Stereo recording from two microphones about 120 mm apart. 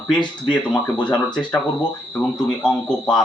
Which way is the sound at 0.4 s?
10° left (ahead or behind).